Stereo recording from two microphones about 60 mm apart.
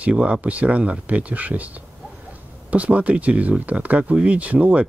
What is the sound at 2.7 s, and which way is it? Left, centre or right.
Speech, right.